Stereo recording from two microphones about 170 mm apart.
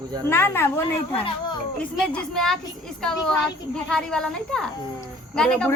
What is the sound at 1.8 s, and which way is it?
Speech, 5° left (ahead or behind).